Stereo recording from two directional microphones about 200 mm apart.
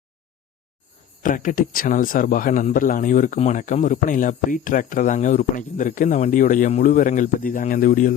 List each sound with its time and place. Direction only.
1.2 s a man's voice: 40° left (ahead or behind)